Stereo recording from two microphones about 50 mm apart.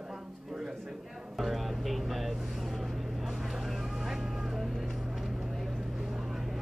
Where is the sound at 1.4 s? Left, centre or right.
Centre.